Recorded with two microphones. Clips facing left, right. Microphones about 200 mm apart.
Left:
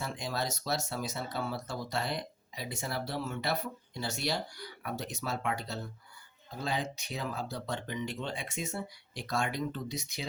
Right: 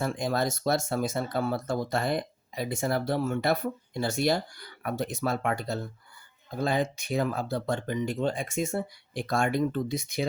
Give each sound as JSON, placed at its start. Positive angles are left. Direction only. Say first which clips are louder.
{"t": 0.0, "sound": "speech", "louder": "right 8 dB", "side_deg": -50}